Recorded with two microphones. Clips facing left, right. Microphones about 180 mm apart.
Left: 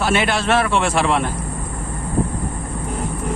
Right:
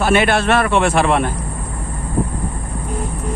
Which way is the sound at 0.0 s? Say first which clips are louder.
Right 4 dB; 55° right (ahead or behind).